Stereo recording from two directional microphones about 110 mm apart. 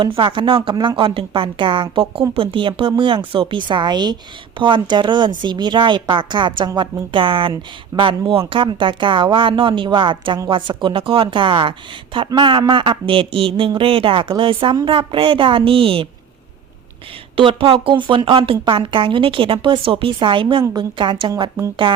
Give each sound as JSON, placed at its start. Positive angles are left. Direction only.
{"t": 0.0, "sound": "a woman's voice", "side_deg": -45}
{"t": 17.3, "sound": "a woman's voice", "side_deg": -55}